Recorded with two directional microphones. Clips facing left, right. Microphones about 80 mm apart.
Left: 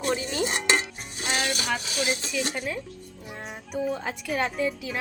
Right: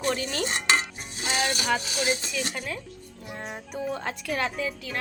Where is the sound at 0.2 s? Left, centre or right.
Centre.